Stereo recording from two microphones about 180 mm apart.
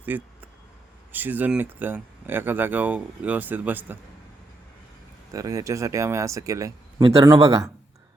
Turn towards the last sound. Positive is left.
turn(degrees=-15)  # may be behind; listen again after turning